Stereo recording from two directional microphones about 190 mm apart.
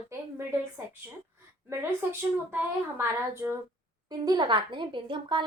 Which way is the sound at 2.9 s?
15° right (ahead or behind).